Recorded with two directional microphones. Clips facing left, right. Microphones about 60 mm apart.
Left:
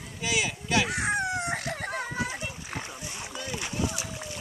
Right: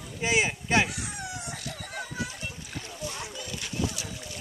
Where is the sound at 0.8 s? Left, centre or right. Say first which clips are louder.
Left 9 dB; left.